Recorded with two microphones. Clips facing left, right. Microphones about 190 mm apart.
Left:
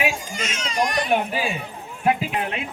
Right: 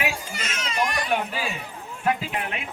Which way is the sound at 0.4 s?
10° left (ahead or behind).